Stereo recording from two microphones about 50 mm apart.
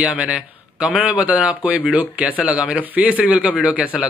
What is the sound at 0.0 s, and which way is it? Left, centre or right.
Speech, right.